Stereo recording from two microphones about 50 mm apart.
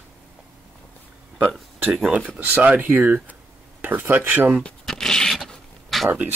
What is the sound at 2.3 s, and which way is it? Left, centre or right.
Speech, right.